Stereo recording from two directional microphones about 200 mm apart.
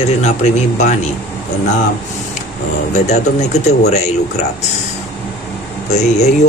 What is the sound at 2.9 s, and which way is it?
Speech, 35° left (ahead or behind).